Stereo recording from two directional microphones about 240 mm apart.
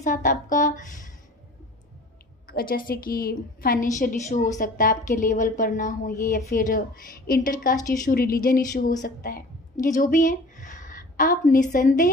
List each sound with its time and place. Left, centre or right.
0.0 s speech: left
2.4 s a woman's voice: left